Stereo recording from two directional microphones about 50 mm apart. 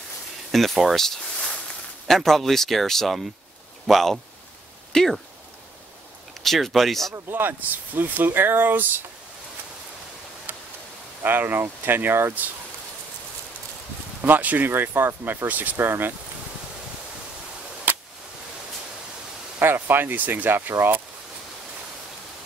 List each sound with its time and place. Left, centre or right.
0.5 s speech: centre
4.9 s speech: centre
6.4 s speech: centre
7.2 s speech: right
10.5 s tick-tock: right
11.2 s speech: right
14.3 s speech: right
14.7 s speech: right
15.8 s speech: right
17.9 s a sound: right
19.6 s speech: right